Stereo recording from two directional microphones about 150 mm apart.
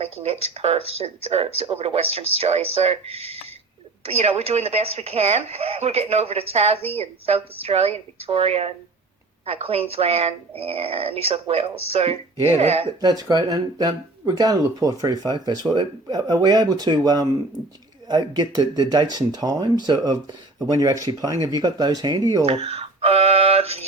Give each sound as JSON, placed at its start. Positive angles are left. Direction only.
{"t": 0.0, "sound": "a woman's voice", "side_deg": -40}
{"t": 13.0, "sound": "speech", "side_deg": -25}
{"t": 22.4, "sound": "speech", "side_deg": -40}